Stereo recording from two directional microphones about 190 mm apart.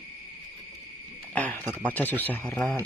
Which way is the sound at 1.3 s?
10° left (ahead or behind).